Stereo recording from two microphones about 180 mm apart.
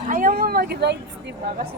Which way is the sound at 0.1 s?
50° right (ahead or behind).